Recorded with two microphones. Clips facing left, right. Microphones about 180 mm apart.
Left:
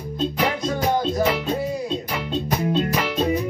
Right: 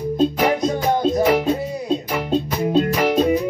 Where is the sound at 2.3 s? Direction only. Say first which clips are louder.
Right 4 dB; 45° right (ahead or behind).